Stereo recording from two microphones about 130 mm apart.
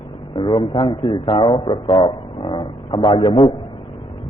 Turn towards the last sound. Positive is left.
turn(degrees=40)  # may be behind; listen again after turning